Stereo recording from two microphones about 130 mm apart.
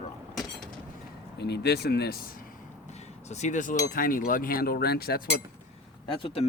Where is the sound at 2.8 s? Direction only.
60° left (ahead or behind); by 4.5 s 90° left.